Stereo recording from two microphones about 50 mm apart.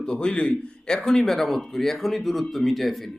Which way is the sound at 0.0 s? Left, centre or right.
Centre.